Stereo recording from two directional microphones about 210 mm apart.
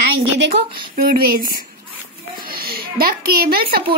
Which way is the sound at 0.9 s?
45° right (ahead or behind).